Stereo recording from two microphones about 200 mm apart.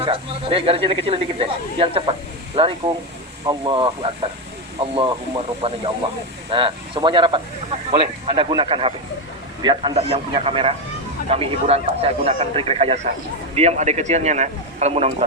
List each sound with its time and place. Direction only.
0.0 s a man's voice: 25° right (ahead or behind)